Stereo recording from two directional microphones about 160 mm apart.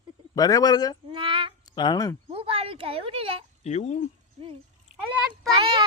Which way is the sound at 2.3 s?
35° right (ahead or behind).